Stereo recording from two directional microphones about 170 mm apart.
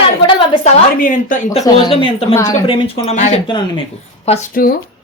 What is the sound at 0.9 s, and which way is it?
Speech, 55° left (ahead or behind).